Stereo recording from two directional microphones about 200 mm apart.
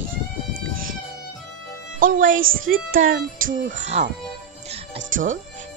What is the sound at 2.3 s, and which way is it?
Music, 80° right.